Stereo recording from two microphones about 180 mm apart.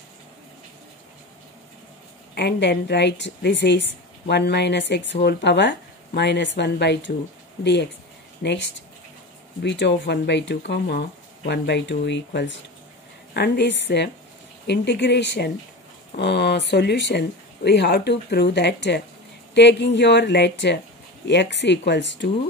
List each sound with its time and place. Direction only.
2.3 s a woman's voice: 65° left (ahead or behind)
8.4 s a woman's voice: 70° left (ahead or behind)